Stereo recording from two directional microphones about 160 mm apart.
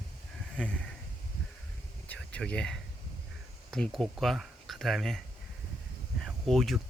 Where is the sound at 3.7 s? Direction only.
5° left (ahead or behind).